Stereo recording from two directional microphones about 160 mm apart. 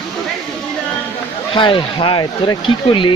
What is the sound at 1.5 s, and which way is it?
Speech, 30° left (ahead or behind).